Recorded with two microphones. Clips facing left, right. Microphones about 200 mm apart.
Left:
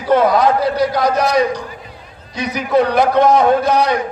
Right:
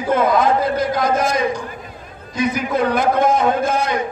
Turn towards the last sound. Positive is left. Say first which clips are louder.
# left 4 dB
turn(degrees=-50)  # may be behind; listen again after turning